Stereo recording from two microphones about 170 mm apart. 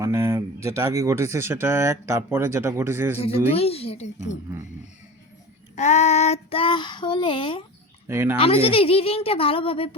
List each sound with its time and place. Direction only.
0.0 s speech: 15° right (ahead or behind)
3.5 s child singing: 35° left (ahead or behind)
5.7 s child singing: 45° left (ahead or behind)
8.0 s speech: 10° right (ahead or behind)
8.4 s child singing: 35° left (ahead or behind)